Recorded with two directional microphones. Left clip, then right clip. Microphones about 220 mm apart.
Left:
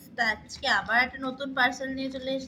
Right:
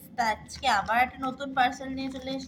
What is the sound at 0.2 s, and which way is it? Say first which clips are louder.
A woman's voice: even; 5° right (ahead or behind).